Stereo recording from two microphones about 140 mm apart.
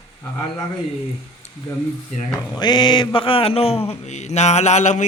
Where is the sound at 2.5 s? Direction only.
30° left (ahead or behind).